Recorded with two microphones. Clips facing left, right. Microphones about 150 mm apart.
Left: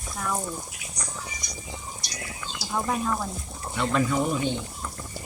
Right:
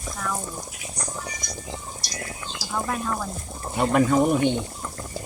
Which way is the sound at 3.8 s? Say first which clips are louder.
Right 5 dB; 50° right (ahead or behind).